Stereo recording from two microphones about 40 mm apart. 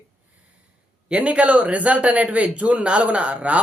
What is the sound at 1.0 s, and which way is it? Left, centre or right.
A man's voice, right.